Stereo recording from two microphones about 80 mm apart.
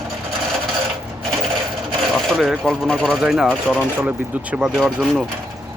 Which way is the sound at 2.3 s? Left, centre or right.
Centre.